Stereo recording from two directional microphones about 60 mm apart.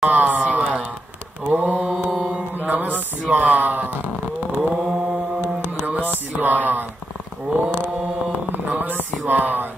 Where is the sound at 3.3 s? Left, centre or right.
Right.